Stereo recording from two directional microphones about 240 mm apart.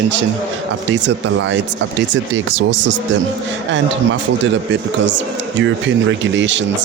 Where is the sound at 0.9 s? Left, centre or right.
Right.